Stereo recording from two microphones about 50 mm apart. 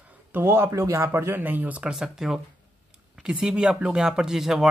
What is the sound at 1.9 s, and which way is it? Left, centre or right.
Speech, centre.